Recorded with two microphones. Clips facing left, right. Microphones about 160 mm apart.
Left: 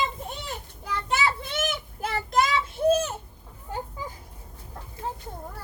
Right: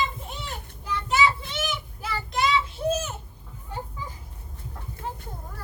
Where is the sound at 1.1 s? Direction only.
55° left (ahead or behind).